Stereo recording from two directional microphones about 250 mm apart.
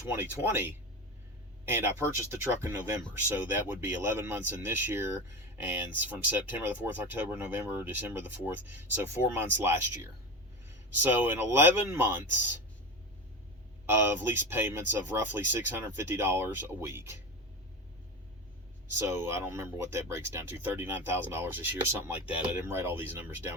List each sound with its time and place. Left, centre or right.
0.1 s speech: centre
13.8 s speech: centre
19.0 s speech: centre